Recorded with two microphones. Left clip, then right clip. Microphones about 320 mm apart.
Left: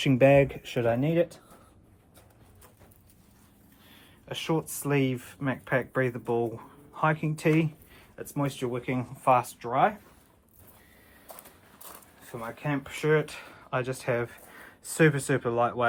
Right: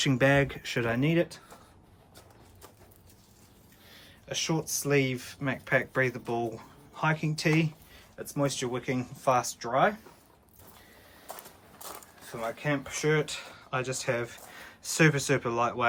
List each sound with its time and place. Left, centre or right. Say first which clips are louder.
0.0 s speech: left 4 dB; centre
4.3 s speech: left 1 dB; centre
11.9 s a sound: right 5 dB; right
12.6 s speech: left 1 dB; centre